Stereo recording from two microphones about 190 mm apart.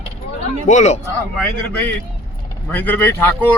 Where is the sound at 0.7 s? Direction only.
40° left (ahead or behind).